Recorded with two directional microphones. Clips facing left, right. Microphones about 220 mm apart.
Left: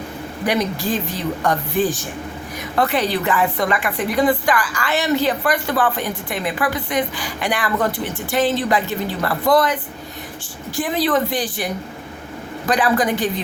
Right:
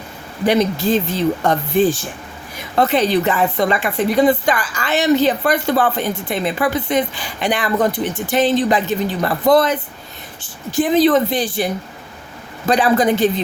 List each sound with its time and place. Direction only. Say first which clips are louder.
0.4 s a woman's voice: right 5 dB; 25° right (ahead or behind)